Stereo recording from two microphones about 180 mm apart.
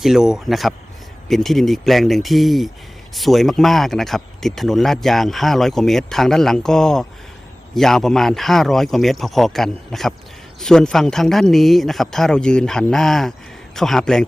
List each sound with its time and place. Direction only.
0.0 s speech: 5° right (ahead or behind)